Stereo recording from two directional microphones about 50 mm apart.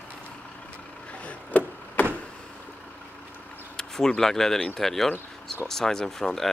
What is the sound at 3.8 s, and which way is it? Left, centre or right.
Speech, centre.